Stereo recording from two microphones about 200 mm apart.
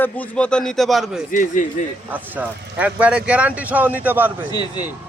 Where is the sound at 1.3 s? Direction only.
40° left (ahead or behind).